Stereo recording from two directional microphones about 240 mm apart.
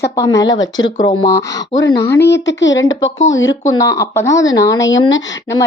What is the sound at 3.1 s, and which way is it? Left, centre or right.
Speech, left.